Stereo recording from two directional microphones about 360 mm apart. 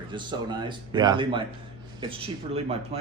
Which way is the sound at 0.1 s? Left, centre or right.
Centre.